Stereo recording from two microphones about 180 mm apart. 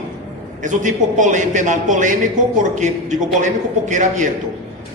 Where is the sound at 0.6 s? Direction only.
45° right (ahead or behind).